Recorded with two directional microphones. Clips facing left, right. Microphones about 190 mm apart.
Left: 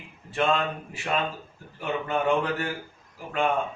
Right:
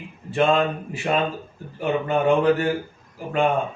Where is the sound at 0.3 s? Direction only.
20° right (ahead or behind).